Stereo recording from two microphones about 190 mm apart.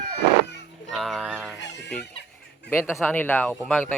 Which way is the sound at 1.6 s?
70° left (ahead or behind).